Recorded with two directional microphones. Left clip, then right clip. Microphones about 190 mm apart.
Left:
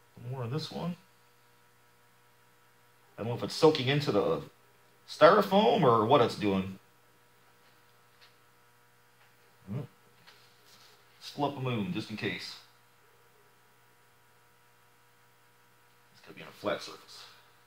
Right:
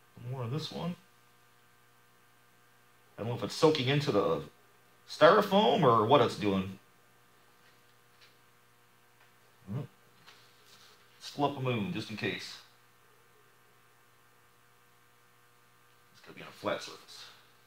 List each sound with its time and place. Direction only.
0.3 s speech: 5° right (ahead or behind)
3.2 s speech: 5° right (ahead or behind)
11.1 s speech: 10° right (ahead or behind)
16.3 s speech: 10° right (ahead or behind)